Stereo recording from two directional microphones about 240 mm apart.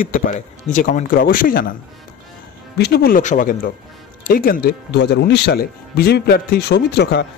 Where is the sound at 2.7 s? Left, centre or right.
Left.